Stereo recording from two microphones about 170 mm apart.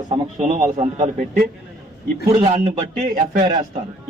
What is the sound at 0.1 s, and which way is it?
A man's voice, 40° right (ahead or behind).